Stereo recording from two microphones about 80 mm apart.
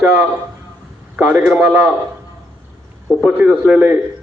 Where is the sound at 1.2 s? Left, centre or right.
Centre.